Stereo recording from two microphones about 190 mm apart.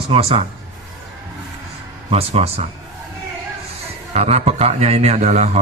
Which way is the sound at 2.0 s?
30° right (ahead or behind).